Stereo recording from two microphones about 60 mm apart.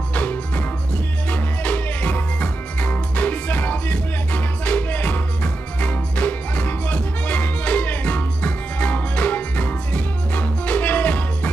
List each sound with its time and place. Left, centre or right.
0.1 s music: left